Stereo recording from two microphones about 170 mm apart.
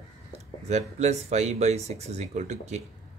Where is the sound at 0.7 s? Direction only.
40° right (ahead or behind).